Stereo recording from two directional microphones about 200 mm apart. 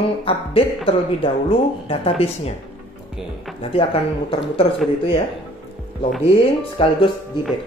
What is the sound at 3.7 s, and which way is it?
Speech, 30° left (ahead or behind).